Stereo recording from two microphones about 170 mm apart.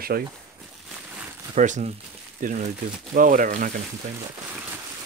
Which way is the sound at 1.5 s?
45° right (ahead or behind).